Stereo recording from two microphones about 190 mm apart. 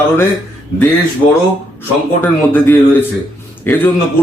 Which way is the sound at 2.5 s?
10° left (ahead or behind).